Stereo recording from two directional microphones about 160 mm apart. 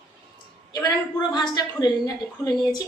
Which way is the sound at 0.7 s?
25° left (ahead or behind).